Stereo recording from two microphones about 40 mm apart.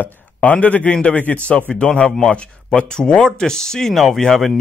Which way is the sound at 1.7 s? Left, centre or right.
Left.